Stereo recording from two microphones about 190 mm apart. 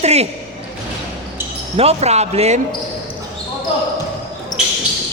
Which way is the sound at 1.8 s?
35° right (ahead or behind).